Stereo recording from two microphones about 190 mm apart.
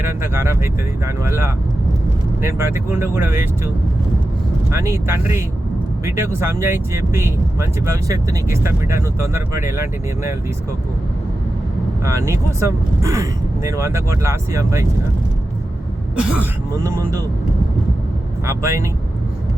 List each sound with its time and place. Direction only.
0.0 s speech: 15° right (ahead or behind)
4.7 s speech: 15° right (ahead or behind)
12.0 s speech: 15° right (ahead or behind)
16.1 s speech: 5° right (ahead or behind)
18.4 s speech: 15° right (ahead or behind)